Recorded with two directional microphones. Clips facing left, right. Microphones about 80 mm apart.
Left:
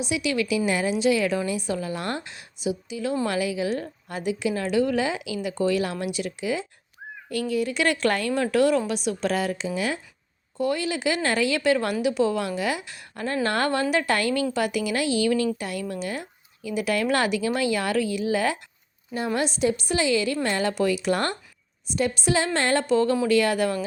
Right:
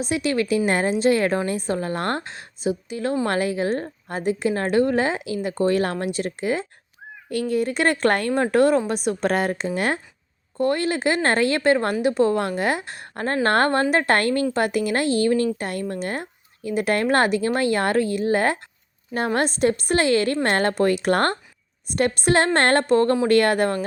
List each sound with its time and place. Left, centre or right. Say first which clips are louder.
0.0 s a woman's voice: right 3 dB; right